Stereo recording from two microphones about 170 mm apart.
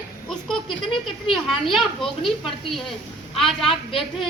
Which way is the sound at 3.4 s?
35° left (ahead or behind).